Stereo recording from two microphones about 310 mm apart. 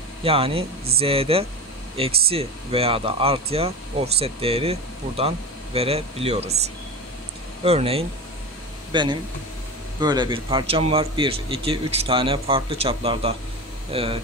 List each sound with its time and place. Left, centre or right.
0.2 s a man's voice: centre
7.6 s a man's voice: centre